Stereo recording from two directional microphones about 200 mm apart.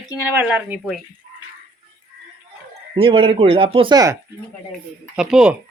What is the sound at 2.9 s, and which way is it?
Speech, 25° right (ahead or behind).